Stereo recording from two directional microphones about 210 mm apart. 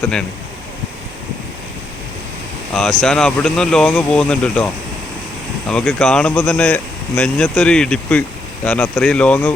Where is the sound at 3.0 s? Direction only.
5° left (ahead or behind).